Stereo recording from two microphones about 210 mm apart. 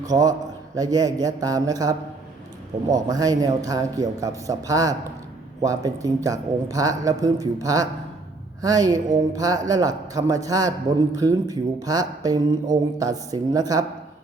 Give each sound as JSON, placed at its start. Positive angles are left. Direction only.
{"t": 0.0, "sound": "speech", "side_deg": -15}